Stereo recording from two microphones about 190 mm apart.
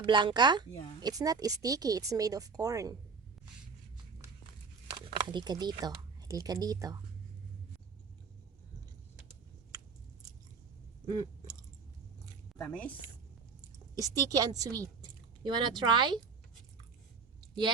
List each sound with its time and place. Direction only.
0.0 s speech: 25° right (ahead or behind)
4.9 s speech: 25° right (ahead or behind)
11.1 s a sound: 20° right (ahead or behind)
12.5 s a woman's voice: 5° left (ahead or behind)
14.0 s a woman's voice: 20° right (ahead or behind)